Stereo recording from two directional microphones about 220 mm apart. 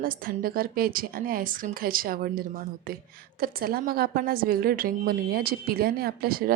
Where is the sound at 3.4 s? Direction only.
45° right (ahead or behind).